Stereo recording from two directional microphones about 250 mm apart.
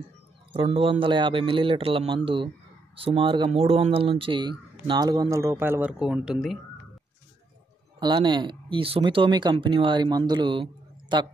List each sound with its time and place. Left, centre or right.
0.5 s speech: right; by 6.6 s centre
8.0 s speech: centre